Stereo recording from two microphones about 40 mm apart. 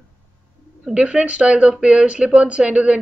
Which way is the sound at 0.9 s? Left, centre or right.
Right.